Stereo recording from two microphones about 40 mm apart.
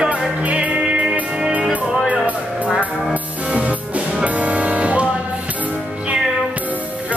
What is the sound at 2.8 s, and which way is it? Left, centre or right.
Music, right.